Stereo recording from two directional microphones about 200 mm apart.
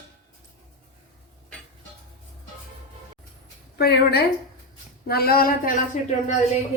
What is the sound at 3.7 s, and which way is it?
A woman's voice, 55° left (ahead or behind).